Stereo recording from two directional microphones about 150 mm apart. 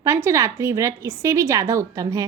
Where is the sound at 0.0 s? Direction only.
20° right (ahead or behind).